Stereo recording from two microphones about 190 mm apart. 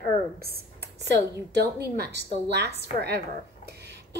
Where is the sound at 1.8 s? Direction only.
60° right (ahead or behind).